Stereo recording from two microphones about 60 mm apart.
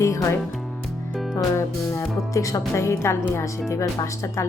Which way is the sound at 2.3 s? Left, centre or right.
Left.